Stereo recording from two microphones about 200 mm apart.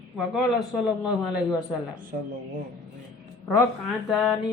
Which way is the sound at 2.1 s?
45° right (ahead or behind).